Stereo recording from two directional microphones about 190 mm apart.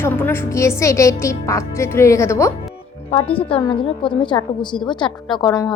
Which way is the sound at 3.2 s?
30° left (ahead or behind).